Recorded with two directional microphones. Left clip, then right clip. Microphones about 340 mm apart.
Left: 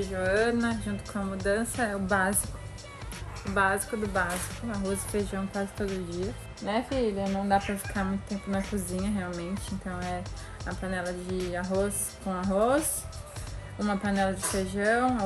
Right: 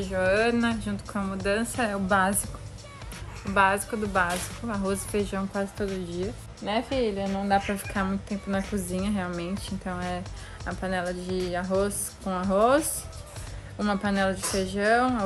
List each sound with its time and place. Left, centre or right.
0.0 s a woman's voice: centre
3.4 s a woman's voice: centre